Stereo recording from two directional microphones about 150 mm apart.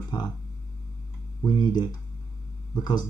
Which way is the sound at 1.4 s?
30° left (ahead or behind).